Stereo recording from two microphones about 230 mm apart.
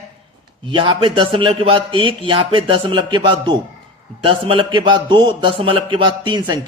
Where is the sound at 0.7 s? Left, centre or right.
Right.